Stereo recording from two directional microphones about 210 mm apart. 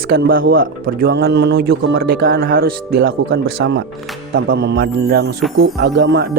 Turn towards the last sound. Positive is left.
turn(degrees=-50)  # may be behind; listen again after turning